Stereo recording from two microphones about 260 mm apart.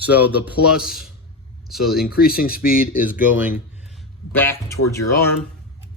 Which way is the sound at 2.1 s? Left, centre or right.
Left.